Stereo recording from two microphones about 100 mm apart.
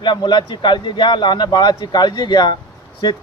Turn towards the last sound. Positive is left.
turn(degrees=50)  # may be behind; listen again after turning